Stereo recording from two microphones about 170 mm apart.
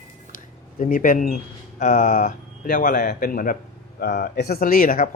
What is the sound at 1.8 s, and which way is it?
Speech, 50° left (ahead or behind).